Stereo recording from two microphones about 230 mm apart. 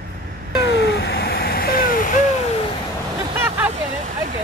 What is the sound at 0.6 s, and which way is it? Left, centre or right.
Vehicle, left.